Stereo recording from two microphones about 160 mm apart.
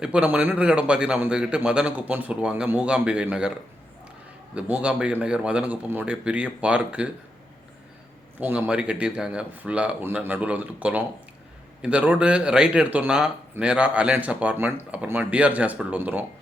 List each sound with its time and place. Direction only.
0.0 s speech: 5° right (ahead or behind)
4.5 s speech: 5° right (ahead or behind)
8.4 s speech: 10° right (ahead or behind)